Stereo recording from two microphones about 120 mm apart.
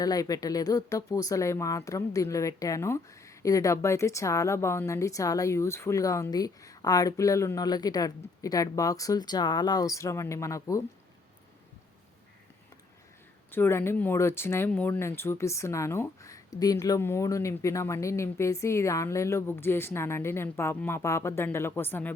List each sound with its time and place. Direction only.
0.0 s speech: 30° left (ahead or behind)
13.5 s speech: 20° left (ahead or behind)